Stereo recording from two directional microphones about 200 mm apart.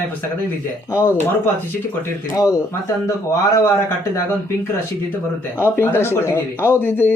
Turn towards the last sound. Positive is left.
turn(degrees=10)  # may be behind; listen again after turning